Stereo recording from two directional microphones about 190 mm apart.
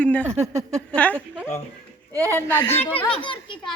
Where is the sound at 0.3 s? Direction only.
15° right (ahead or behind).